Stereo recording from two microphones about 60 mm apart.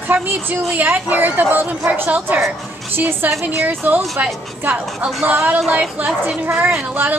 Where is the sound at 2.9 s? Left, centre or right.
Right.